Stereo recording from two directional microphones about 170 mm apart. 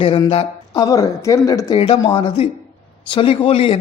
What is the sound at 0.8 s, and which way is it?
A man's voice, 20° left (ahead or behind).